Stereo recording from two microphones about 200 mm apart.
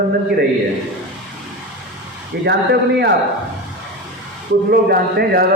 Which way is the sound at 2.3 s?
55° right (ahead or behind).